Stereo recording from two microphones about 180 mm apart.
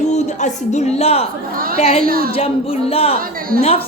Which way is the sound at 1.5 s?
55° right (ahead or behind).